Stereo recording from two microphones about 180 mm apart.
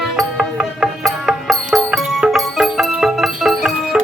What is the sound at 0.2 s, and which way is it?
Music, centre (ahead or behind).